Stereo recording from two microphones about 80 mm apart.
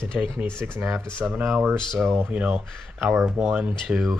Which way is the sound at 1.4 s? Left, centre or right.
Centre.